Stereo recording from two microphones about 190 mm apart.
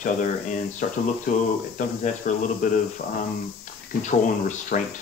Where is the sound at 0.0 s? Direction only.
45° left (ahead or behind).